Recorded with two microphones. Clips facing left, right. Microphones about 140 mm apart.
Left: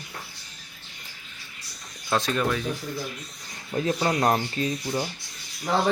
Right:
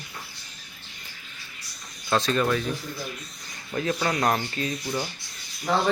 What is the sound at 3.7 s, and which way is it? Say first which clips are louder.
Speech: left 2 dB; 25° left (ahead or behind).